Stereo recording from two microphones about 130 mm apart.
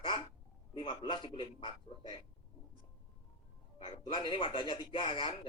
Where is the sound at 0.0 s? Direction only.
40° left (ahead or behind).